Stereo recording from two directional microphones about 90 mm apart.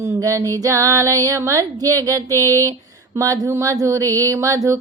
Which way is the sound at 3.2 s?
35° right (ahead or behind).